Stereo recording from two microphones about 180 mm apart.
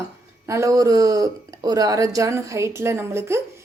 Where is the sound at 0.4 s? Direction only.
15° right (ahead or behind).